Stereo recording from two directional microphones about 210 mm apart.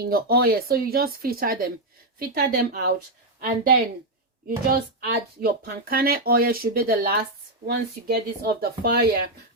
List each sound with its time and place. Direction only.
0.0 s speech: 45° right (ahead or behind)
4.4 s speech: 45° right (ahead or behind)